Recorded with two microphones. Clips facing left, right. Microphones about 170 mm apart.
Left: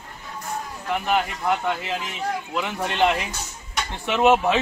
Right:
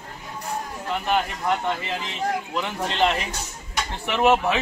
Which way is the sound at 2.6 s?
15° left (ahead or behind).